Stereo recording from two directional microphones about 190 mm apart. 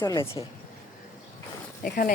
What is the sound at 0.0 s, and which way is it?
Speech, 20° left (ahead or behind).